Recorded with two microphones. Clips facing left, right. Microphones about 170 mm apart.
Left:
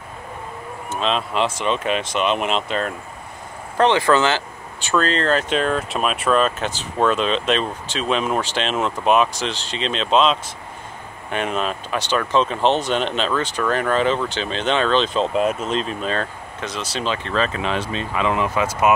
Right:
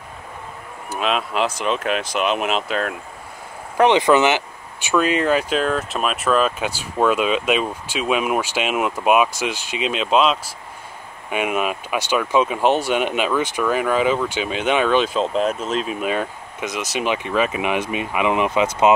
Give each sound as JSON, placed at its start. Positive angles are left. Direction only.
{"t": 0.9, "sound": "speech", "side_deg": -5}
{"t": 3.7, "sound": "speech", "side_deg": -15}
{"t": 15.2, "sound": "speech", "side_deg": 0}